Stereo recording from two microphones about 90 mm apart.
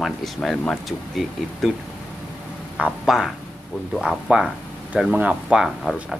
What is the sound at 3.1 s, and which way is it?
Speech, 5° right (ahead or behind).